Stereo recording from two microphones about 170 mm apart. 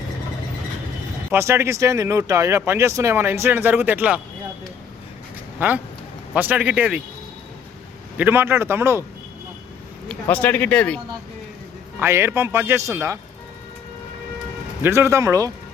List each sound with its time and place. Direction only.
1.3 s speech: 15° right (ahead or behind)
5.5 s speech: 10° right (ahead or behind)
8.2 s speech: 10° right (ahead or behind)
10.1 s speech: 10° left (ahead or behind)
11.9 s speech: 15° right (ahead or behind)
14.8 s speech: 15° right (ahead or behind)